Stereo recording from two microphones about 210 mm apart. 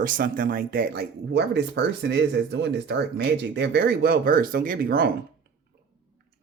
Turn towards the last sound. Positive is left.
turn(degrees=-45)  # may be behind; listen again after turning